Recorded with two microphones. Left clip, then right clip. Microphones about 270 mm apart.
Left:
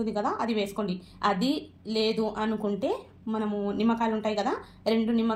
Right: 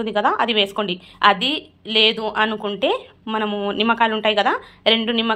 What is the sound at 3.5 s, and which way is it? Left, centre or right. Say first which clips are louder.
Speech: right 8 dB; right.